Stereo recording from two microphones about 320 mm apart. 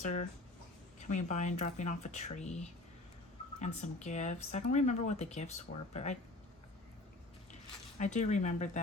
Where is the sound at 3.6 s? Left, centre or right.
Left.